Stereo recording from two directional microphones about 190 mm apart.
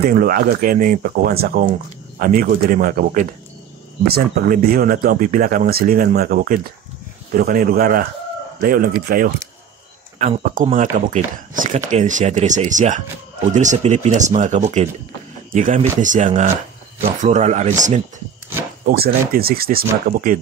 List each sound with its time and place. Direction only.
0.0 s speech: 50° right (ahead or behind)
18.9 s speech: 50° right (ahead or behind)